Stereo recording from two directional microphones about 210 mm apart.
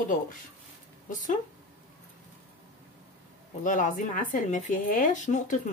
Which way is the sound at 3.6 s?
40° left (ahead or behind).